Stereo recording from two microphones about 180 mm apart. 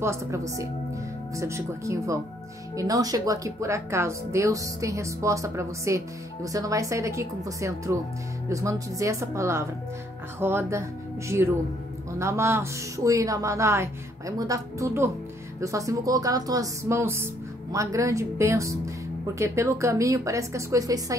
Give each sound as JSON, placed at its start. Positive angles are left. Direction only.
{"t": 0.0, "sound": "speech", "side_deg": -15}